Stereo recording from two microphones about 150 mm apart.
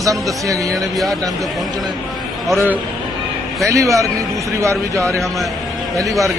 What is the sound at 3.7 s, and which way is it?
Speech, 20° right (ahead or behind).